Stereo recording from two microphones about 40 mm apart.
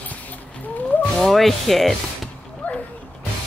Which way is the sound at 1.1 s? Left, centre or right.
Centre.